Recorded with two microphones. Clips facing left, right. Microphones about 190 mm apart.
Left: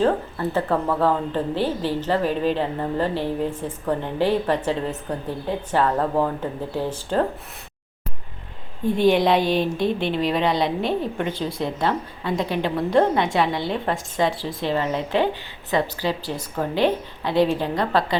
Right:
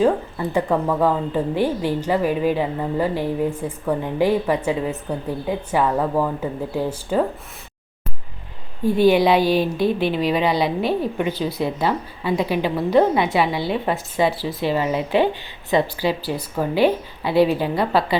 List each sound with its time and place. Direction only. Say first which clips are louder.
0.0 s speech: right 2 dB; 15° right (ahead or behind)
8.8 s a woman's voice: right 3 dB; 5° right (ahead or behind)